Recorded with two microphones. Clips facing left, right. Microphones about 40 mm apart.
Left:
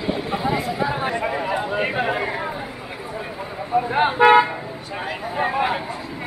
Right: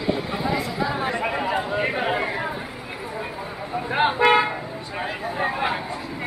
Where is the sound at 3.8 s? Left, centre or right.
Centre.